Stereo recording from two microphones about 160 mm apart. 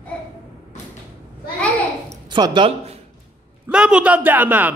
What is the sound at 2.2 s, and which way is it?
Speech, 30° right (ahead or behind).